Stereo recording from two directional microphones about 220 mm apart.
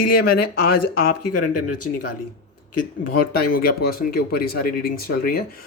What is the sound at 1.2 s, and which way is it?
Speech, 90° left.